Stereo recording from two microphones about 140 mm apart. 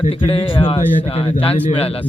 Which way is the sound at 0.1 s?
40° left (ahead or behind).